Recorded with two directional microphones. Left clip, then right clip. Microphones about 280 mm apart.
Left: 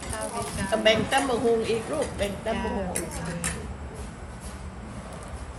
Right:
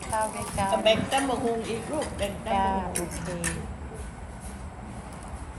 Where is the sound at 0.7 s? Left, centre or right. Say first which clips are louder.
Left 2 dB; centre.